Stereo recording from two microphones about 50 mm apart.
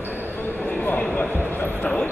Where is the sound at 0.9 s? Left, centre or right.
Left.